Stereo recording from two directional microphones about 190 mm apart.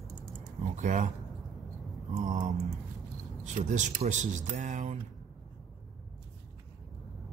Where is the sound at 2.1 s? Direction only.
40° right (ahead or behind).